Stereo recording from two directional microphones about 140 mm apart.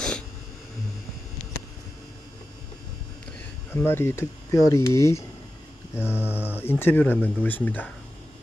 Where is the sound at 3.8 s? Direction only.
15° left (ahead or behind).